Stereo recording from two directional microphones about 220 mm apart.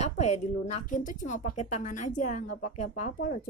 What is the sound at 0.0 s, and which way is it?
A woman's voice, 30° left (ahead or behind).